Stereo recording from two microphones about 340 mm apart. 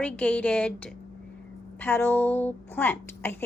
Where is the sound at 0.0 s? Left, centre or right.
Centre.